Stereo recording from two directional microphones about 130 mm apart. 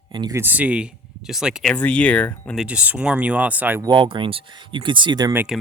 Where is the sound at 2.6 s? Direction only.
10° right (ahead or behind).